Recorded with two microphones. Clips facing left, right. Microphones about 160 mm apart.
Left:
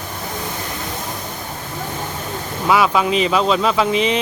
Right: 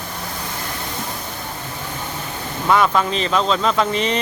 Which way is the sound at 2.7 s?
5° left (ahead or behind).